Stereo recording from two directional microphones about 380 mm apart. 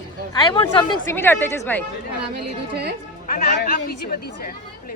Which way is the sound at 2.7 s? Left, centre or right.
Right.